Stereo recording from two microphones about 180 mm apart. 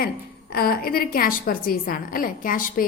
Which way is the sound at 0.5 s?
55° left (ahead or behind).